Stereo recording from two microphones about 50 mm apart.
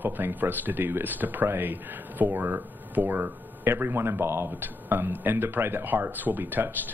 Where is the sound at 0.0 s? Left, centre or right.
Right.